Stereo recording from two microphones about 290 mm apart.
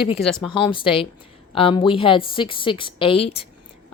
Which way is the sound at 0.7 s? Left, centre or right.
Centre.